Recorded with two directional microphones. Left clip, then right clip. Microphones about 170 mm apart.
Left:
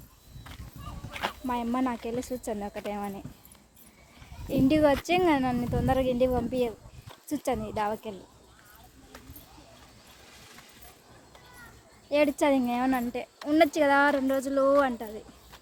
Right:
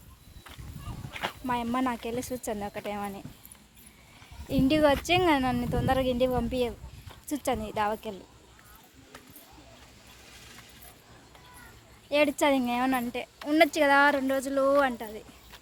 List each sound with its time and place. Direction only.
1.1 s dog: 5° right (ahead or behind)
1.5 s speech: 5° left (ahead or behind)
2.9 s speech: 10° left (ahead or behind)
4.4 s speech: 10° left (ahead or behind)
10.3 s a sound: centre (ahead or behind)
12.0 s speech: 10° left (ahead or behind)
14.6 s speech: 5° left (ahead or behind)